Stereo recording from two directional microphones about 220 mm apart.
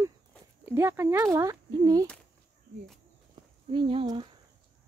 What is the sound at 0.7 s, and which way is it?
Speech, 10° right (ahead or behind).